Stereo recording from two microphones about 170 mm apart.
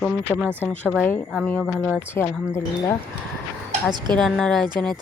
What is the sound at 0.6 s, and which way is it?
Speech, 10° left (ahead or behind).